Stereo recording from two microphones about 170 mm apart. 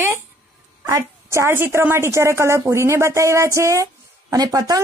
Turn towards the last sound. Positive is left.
turn(degrees=-20)  # may be behind; listen again after turning